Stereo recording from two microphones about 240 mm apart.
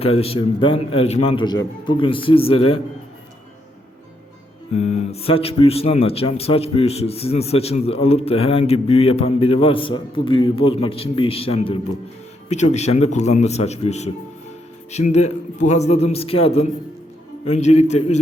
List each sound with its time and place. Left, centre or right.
0.0 s speech: left
4.7 s speech: left